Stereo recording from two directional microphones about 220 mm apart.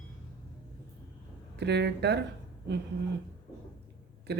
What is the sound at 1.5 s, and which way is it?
Speech, 50° right (ahead or behind).